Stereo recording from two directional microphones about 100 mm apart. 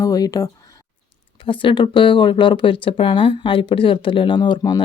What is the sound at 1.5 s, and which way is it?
Speech, 60° left (ahead or behind).